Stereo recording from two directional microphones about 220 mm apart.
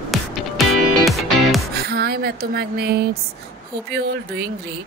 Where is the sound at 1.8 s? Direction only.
45° right (ahead or behind).